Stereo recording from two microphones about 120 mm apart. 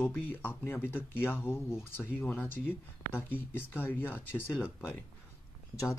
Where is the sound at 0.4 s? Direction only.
15° left (ahead or behind).